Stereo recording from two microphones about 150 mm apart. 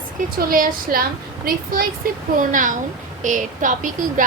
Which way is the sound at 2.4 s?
60° right (ahead or behind).